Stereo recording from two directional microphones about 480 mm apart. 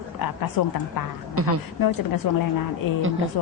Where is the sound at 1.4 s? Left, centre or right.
Right.